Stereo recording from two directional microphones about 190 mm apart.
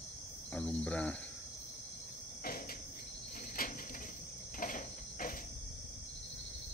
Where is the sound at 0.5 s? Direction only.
5° left (ahead or behind).